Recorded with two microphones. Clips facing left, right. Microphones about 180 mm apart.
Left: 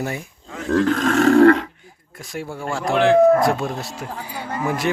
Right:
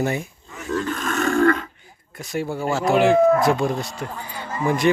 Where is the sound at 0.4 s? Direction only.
90° left; by 1.7 s 75° left (ahead or behind).